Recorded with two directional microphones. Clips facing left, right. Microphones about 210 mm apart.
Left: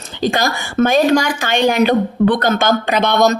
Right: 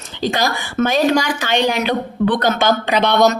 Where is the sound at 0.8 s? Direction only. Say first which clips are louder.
Left 3 dB; 50° left (ahead or behind).